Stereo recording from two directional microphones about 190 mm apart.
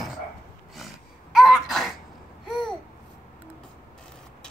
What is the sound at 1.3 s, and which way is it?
Sneeze, centre (ahead or behind).